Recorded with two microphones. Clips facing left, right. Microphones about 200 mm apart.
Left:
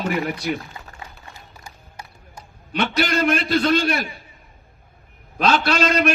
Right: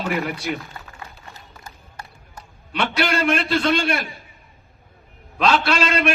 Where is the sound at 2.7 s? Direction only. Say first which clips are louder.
Left 1 dB; 45° left (ahead or behind).